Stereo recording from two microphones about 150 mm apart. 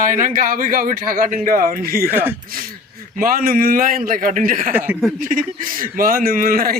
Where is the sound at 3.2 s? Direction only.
75° right (ahead or behind).